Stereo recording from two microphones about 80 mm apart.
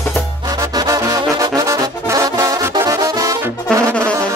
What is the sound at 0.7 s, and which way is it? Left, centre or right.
Brass instrument, right.